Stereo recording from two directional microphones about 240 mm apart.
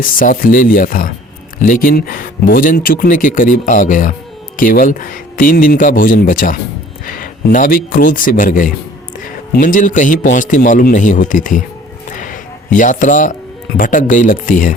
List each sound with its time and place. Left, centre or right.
0.0 s speech: left
12.1 s a sound: left
13.7 s speech: left